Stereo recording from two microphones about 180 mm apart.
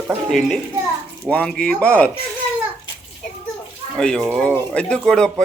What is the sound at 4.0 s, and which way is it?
Speech, 5° left (ahead or behind).